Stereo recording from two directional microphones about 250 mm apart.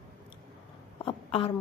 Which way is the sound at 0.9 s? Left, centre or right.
Left.